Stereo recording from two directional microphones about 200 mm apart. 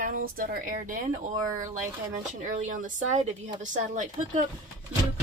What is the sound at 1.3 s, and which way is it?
Speech, 15° right (ahead or behind).